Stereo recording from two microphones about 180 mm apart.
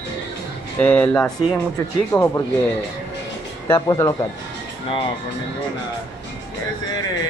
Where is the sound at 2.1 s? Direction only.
20° left (ahead or behind).